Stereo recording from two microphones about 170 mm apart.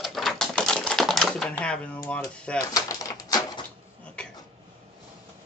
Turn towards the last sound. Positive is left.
turn(degrees=5)  # may be behind; listen again after turning